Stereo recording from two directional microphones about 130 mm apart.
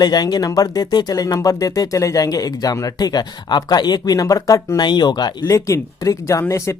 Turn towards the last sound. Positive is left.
turn(degrees=20)  # may be behind; listen again after turning